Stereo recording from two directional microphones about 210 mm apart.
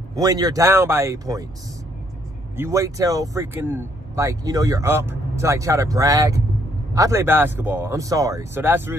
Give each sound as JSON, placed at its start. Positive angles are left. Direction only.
{"t": 0.1, "sound": "speech", "side_deg": -15}
{"t": 2.5, "sound": "speech", "side_deg": -15}